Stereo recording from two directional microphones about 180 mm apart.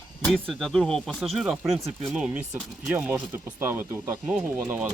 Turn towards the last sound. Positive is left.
turn(degrees=-10)  # may be behind; listen again after turning